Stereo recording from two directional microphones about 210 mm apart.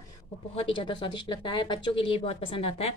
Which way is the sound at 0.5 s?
25° left (ahead or behind).